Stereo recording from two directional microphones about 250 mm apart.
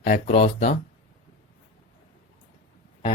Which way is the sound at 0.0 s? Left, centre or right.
Left.